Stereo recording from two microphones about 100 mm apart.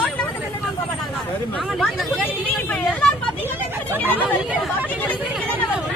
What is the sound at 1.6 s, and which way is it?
Chatter, centre (ahead or behind).